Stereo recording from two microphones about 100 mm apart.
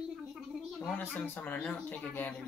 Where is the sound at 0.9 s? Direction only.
20° left (ahead or behind).